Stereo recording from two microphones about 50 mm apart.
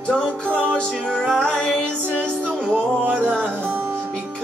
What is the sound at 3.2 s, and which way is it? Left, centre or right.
Music, centre.